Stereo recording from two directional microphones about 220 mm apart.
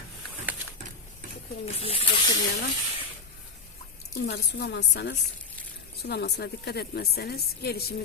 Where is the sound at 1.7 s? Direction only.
25° left (ahead or behind).